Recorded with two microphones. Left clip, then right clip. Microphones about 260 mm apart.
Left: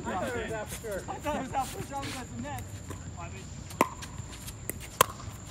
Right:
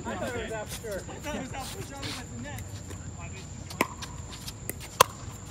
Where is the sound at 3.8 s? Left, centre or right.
Centre.